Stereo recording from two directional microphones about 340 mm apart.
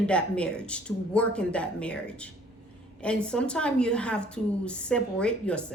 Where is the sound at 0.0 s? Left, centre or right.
Centre.